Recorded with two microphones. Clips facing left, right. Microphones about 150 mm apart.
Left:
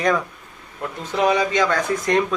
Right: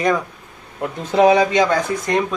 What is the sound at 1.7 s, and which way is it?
Speech, 5° right (ahead or behind).